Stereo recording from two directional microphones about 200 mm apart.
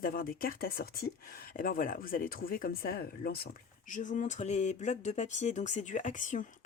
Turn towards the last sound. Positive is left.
turn(degrees=40)  # may be behind; listen again after turning